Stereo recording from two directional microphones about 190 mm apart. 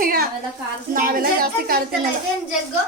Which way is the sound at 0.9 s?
50° right (ahead or behind).